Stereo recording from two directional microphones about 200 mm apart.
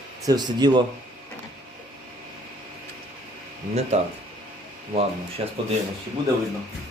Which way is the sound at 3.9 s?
35° right (ahead or behind).